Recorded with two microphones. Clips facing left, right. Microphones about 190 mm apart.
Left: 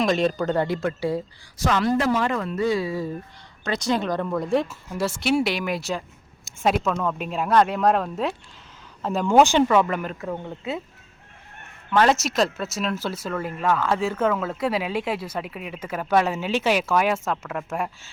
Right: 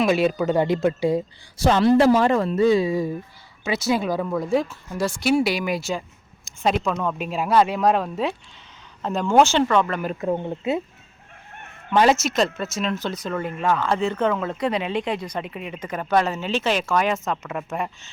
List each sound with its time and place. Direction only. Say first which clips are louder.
0.0 s speech: right 2 dB; 5° right (ahead or behind)
1.5 s speech: right 5 dB; 30° right (ahead or behind)
3.6 s speech: right 2 dB; 5° right (ahead or behind)
9.4 s speech: left 1 dB; 10° left (ahead or behind)
10.0 s speech: right 5 dB; 15° right (ahead or behind)
12.1 s speech: right 1 dB; centre (ahead or behind)